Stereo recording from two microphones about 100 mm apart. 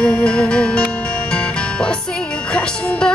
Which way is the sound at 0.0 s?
10° left (ahead or behind).